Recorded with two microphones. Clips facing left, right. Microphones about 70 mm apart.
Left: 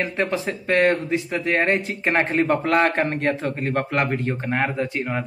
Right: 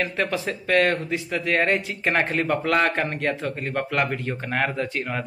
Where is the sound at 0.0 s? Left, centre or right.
Left.